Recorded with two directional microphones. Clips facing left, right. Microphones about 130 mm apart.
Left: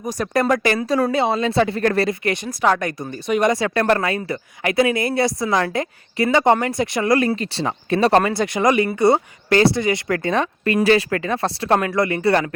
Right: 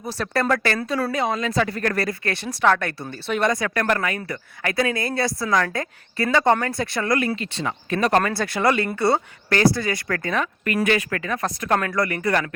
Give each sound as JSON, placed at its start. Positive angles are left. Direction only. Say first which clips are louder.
{"t": 0.0, "sound": "speech", "louder": "left 4 dB", "side_deg": 15}
{"t": 3.5, "sound": "speech", "louder": "left 4 dB", "side_deg": 30}
{"t": 7.2, "sound": "speech", "louder": "left 4 dB", "side_deg": 35}
{"t": 8.2, "sound": "speech", "louder": "left 3 dB", "side_deg": 20}